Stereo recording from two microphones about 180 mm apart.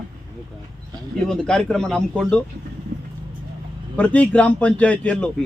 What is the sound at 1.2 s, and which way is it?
A man's voice, 5° left (ahead or behind).